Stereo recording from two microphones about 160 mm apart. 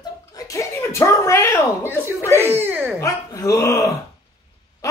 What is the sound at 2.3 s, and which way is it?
Speech, 15° right (ahead or behind).